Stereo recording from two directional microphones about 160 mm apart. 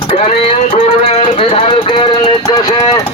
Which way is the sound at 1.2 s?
35° left (ahead or behind).